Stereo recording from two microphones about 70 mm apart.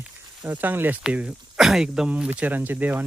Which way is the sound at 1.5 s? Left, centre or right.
Centre.